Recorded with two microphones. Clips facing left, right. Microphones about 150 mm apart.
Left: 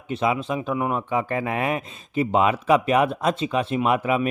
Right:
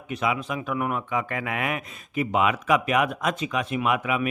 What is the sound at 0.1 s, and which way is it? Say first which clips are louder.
Speech: left 4 dB; 30° left (ahead or behind).